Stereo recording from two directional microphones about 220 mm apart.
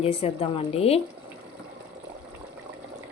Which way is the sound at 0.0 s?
25° left (ahead or behind).